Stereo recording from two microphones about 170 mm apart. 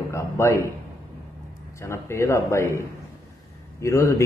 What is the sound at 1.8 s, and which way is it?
A man's voice, 15° left (ahead or behind).